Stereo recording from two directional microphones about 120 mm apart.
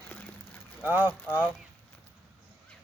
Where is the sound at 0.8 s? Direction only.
15° right (ahead or behind).